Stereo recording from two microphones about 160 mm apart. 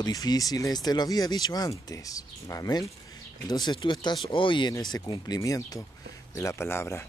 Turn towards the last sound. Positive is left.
turn(degrees=15)  # may be behind; listen again after turning